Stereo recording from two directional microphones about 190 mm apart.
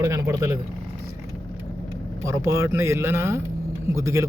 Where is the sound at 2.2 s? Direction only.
15° right (ahead or behind).